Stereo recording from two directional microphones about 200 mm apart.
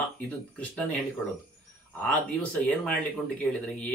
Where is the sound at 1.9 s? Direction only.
5° left (ahead or behind).